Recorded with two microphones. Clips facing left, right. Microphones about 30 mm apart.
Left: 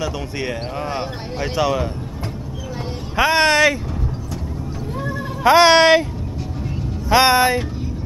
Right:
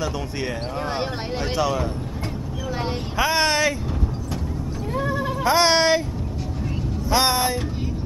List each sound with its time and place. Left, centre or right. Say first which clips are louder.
0.0 s speech: left 2 dB; centre
3.2 s speech: left 6 dB; centre
4.9 s a sound: right 3 dB; centre
5.4 s speech: left 7 dB; left
7.1 s speech: left 7 dB; left